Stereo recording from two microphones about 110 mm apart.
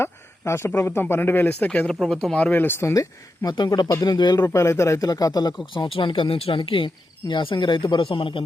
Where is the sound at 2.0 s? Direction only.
Centre (ahead or behind); by 4.5 s 40° left (ahead or behind).